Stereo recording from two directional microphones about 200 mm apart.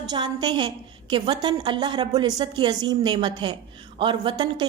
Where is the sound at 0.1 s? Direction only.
20° right (ahead or behind).